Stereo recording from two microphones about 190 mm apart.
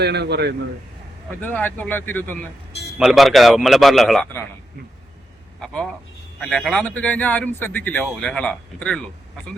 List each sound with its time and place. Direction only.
0.0 s a man's voice: 60° right (ahead or behind)
1.4 s a man's voice: 10° left (ahead or behind)
3.0 s a man's voice: centre (ahead or behind)
5.5 s a man's voice: 5° left (ahead or behind)